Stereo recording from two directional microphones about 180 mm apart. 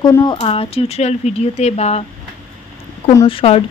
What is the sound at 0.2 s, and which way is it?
A woman's voice, 30° left (ahead or behind).